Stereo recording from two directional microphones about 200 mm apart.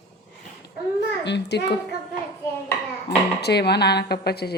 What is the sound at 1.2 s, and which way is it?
Speech, 60° left (ahead or behind).